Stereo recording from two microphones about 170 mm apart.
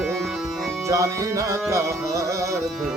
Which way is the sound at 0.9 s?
20° right (ahead or behind).